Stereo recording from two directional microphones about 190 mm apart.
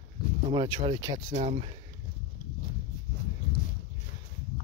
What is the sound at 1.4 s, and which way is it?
Speech, 35° right (ahead or behind).